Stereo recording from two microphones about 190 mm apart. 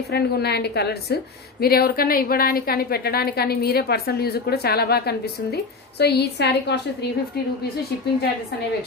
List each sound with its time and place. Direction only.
0.1 s a woman's voice: 60° left (ahead or behind)